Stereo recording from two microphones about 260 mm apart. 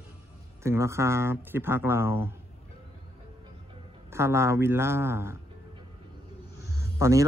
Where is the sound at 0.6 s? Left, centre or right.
Centre.